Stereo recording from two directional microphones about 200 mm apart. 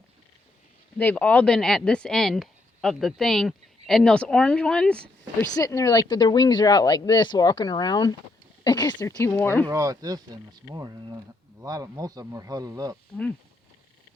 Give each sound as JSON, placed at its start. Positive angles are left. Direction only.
{"t": 0.9, "sound": "speech", "side_deg": 5}
{"t": 5.5, "sound": "speech", "side_deg": 15}
{"t": 9.6, "sound": "a man's voice", "side_deg": -15}